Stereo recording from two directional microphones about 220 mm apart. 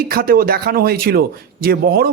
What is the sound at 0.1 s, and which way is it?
A man's voice, 40° right (ahead or behind).